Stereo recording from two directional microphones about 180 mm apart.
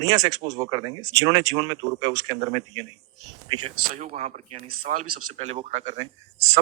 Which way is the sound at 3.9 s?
40° right (ahead or behind).